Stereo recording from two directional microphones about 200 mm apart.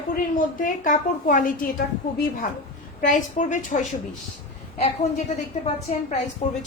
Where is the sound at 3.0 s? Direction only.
40° left (ahead or behind).